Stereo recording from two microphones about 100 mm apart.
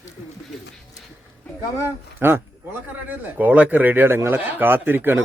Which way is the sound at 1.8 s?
20° right (ahead or behind).